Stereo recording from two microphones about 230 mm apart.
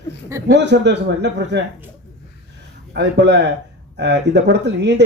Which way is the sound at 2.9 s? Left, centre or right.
Right.